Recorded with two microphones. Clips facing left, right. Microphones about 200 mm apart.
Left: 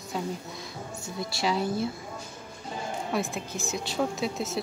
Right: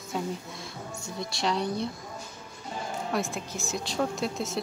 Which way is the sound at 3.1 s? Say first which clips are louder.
Left 1 dB; centre (ahead or behind).